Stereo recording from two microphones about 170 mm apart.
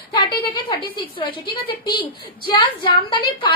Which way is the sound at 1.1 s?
30° left (ahead or behind).